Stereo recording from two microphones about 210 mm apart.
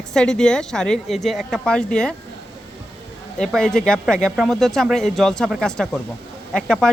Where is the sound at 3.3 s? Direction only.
5° left (ahead or behind).